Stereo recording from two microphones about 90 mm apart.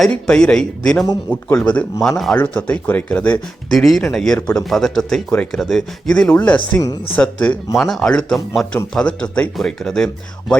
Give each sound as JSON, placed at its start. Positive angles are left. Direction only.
{"t": 0.0, "sound": "speech", "side_deg": 10}
{"t": 2.0, "sound": "speech", "side_deg": 5}
{"t": 2.3, "sound": "speech", "side_deg": 15}
{"t": 3.7, "sound": "speech", "side_deg": 5}
{"t": 6.7, "sound": "speech", "side_deg": 20}
{"t": 7.8, "sound": "speech", "side_deg": 5}